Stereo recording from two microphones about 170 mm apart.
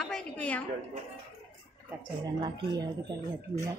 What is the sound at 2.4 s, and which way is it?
Speech, 25° right (ahead or behind).